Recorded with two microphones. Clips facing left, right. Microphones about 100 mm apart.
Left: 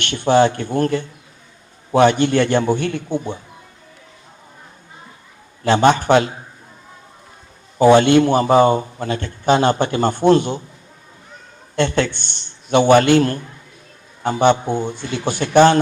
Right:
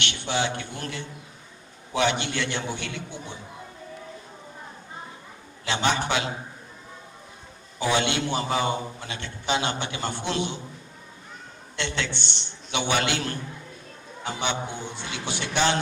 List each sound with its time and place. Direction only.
0.0 s a man's voice: 45° left (ahead or behind)
5.6 s a man's voice: 45° left (ahead or behind)
7.8 s a man's voice: 50° left (ahead or behind)
11.8 s a man's voice: 45° left (ahead or behind)